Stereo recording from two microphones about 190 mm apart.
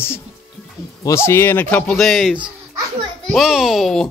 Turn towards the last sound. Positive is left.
turn(degrees=0)  # may be behind; listen again after turning